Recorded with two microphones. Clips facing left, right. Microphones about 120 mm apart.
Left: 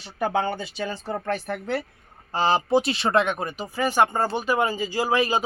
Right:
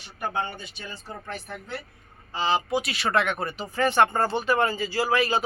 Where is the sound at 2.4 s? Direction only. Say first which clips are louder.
Left 3 dB; 40° left (ahead or behind).